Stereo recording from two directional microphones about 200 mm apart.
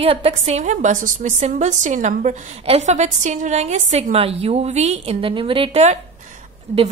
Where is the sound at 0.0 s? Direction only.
30° right (ahead or behind).